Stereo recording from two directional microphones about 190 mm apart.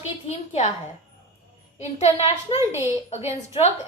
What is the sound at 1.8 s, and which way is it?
Speech, 35° left (ahead or behind).